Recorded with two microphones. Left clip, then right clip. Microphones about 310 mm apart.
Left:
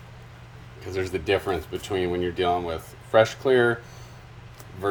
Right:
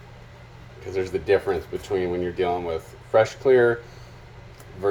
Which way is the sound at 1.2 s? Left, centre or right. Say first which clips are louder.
Right 4 dB; left.